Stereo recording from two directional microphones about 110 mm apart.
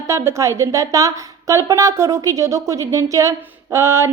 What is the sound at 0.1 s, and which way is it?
A woman's voice, 25° right (ahead or behind).